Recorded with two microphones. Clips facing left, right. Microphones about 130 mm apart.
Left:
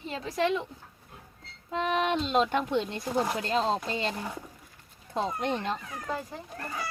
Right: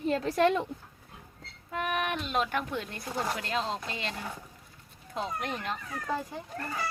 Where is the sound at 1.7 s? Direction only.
25° left (ahead or behind).